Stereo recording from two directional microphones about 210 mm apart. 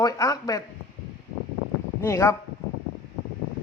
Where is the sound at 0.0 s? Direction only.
15° left (ahead or behind).